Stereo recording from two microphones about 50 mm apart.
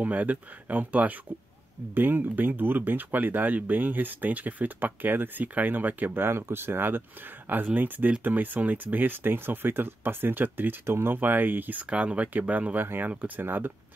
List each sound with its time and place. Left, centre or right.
0.0 s speech: right
11.9 s speech: right
12.3 s speech: right
12.8 s speech: right